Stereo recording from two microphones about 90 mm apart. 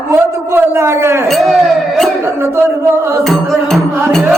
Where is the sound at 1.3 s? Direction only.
Centre (ahead or behind).